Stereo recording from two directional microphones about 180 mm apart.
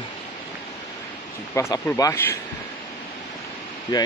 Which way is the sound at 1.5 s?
20° left (ahead or behind).